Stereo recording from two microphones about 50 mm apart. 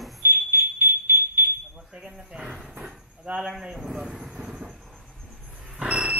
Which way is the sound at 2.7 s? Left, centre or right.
Centre.